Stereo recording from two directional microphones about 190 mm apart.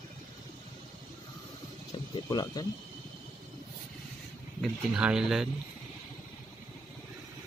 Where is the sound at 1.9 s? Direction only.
20° left (ahead or behind).